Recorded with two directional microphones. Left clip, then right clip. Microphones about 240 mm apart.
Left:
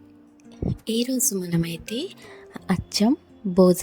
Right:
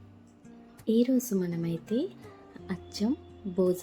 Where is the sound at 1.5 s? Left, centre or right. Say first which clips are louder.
Left 4 dB; left.